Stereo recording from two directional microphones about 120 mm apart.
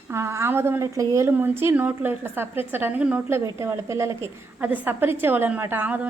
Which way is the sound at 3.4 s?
25° right (ahead or behind).